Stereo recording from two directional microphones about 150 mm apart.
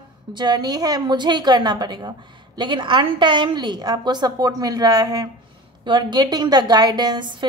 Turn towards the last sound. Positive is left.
turn(degrees=-30)  # may be behind; listen again after turning